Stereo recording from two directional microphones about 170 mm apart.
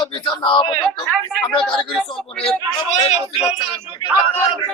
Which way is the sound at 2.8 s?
40° left (ahead or behind).